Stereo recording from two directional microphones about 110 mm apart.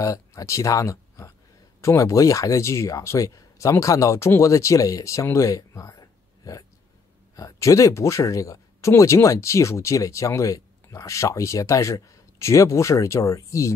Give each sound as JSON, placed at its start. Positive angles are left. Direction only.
{"t": 0.0, "sound": "speech", "side_deg": 30}